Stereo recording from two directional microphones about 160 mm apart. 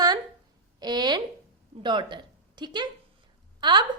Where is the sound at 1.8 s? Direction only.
30° right (ahead or behind).